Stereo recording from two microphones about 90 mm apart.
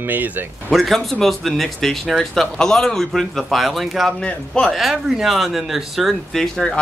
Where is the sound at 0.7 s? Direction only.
Centre (ahead or behind).